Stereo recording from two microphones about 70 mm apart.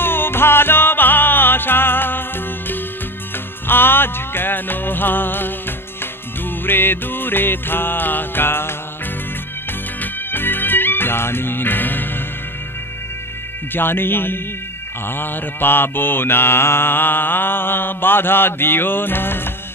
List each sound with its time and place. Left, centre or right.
0.0 s music: left
6.6 s mantra: left
10.3 s music: left
13.7 s mantra: left